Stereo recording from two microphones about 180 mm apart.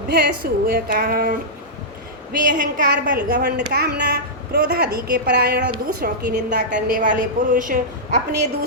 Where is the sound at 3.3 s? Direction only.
60° right (ahead or behind).